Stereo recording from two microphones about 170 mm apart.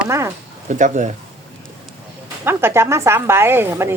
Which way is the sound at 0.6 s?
45° right (ahead or behind).